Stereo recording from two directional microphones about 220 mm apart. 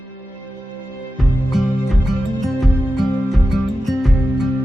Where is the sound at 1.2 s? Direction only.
Centre (ahead or behind).